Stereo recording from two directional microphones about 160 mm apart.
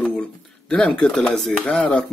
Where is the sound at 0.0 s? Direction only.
5° left (ahead or behind).